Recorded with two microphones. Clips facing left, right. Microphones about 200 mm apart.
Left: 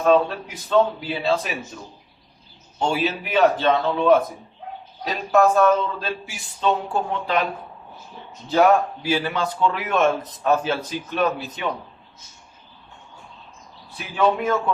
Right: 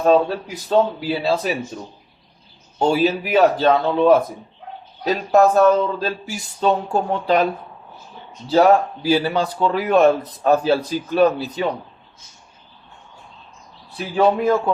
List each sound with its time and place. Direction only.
0.0 s speech: 35° right (ahead or behind)
2.7 s speech: 35° right (ahead or behind)
8.4 s speech: 30° right (ahead or behind)
14.2 s speech: 35° right (ahead or behind)